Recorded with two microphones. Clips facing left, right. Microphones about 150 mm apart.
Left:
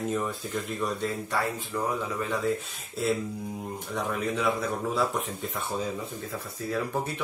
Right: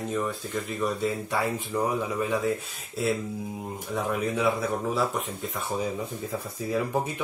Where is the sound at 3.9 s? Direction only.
5° right (ahead or behind).